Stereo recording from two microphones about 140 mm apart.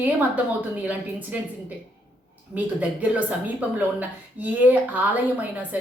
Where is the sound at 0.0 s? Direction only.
10° right (ahead or behind).